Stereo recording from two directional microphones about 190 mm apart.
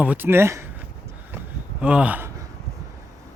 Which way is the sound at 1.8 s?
5° right (ahead or behind).